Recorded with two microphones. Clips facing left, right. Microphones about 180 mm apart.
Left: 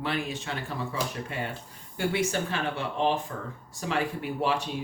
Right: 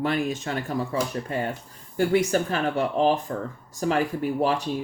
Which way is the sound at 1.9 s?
40° right (ahead or behind).